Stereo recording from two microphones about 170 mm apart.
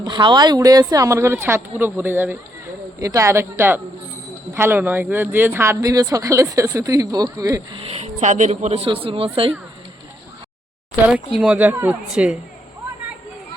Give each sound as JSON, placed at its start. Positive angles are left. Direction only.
{"t": 0.0, "sound": "speech", "side_deg": -25}
{"t": 7.8, "sound": "speech", "side_deg": -35}
{"t": 11.3, "sound": "a woman's voice", "side_deg": -5}